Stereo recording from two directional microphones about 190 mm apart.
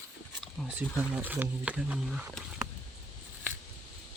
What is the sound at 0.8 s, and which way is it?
Speech, 10° right (ahead or behind).